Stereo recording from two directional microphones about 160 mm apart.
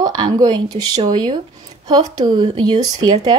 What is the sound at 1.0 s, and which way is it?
Speech, 30° right (ahead or behind).